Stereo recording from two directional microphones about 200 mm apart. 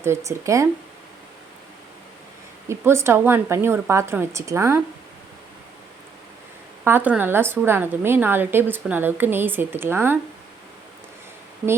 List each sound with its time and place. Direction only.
0.0 s a woman's voice: 15° right (ahead or behind)
2.6 s a woman's voice: 15° right (ahead or behind)
6.8 s a woman's voice: 10° right (ahead or behind)